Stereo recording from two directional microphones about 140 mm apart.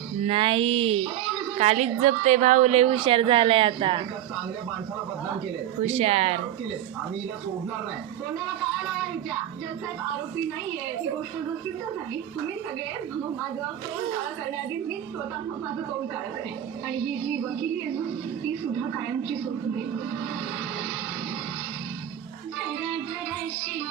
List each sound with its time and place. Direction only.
0.3 s a woman's voice: 40° right (ahead or behind)
5.8 s a woman's voice: 50° right (ahead or behind)